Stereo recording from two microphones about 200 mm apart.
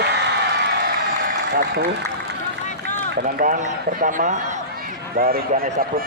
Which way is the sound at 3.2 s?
45° right (ahead or behind).